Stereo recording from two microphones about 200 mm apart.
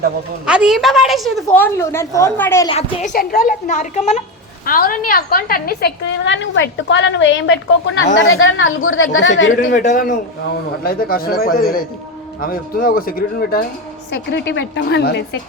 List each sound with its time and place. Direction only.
0.4 s a woman's voice: 5° right (ahead or behind); by 2.6 s 15° left (ahead or behind)
2.6 s a woman's voice: 30° left (ahead or behind)
3.2 s a woman's voice: 45° left (ahead or behind)
6.2 s a woman's voice: 65° left (ahead or behind); by 9.0 s 85° left
9.1 s a woman's voice: 70° left (ahead or behind)
9.7 s a woman's voice: 40° left (ahead or behind)
14.1 s a woman's voice: 60° left (ahead or behind)